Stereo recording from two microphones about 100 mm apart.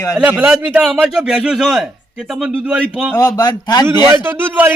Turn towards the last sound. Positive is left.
turn(degrees=-20)  # may be behind; listen again after turning